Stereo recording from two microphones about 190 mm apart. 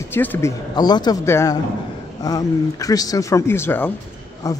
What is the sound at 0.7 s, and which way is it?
Speech, 20° left (ahead or behind).